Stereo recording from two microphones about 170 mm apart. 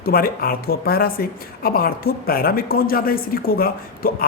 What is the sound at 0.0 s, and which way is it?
Speech, 60° left (ahead or behind).